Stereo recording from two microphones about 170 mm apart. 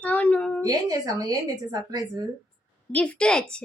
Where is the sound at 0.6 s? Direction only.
20° right (ahead or behind).